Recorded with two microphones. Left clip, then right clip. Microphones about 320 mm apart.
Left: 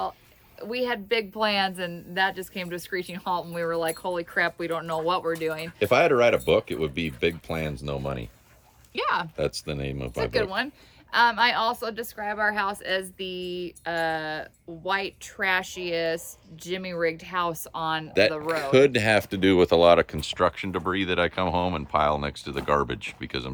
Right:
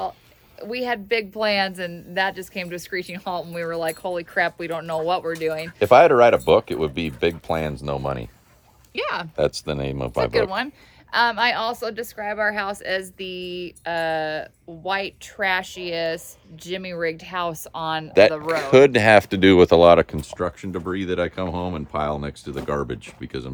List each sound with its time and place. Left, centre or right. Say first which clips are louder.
0.6 s a woman's voice: right 2 dB; centre
5.8 s speech: right 7 dB; centre
9.0 s a woman's voice: even; centre
9.3 s speech: right 6 dB; centre
10.2 s a woman's voice: right 5 dB; centre
18.4 s speech: right 5 dB; centre
20.2 s speech: left 3 dB; centre